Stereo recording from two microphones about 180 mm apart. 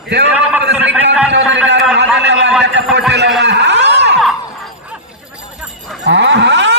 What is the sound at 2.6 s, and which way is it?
Speech, 80° right.